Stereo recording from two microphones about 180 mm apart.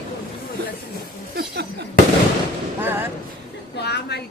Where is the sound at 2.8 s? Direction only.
10° right (ahead or behind).